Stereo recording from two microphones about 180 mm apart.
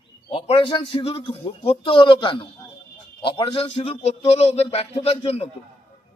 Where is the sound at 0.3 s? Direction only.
30° left (ahead or behind).